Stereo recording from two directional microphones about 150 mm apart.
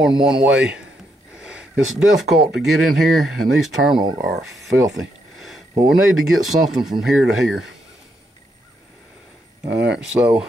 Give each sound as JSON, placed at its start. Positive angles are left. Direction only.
{"t": 0.2, "sound": "speech", "side_deg": -5}
{"t": 1.3, "sound": "a sound", "side_deg": -5}
{"t": 2.5, "sound": "speech", "side_deg": 0}
{"t": 4.0, "sound": "speech", "side_deg": -30}
{"t": 4.3, "sound": "speech", "side_deg": 0}
{"t": 4.9, "sound": "a sound", "side_deg": 0}
{"t": 5.9, "sound": "speech", "side_deg": 0}
{"t": 9.7, "sound": "speech", "side_deg": -5}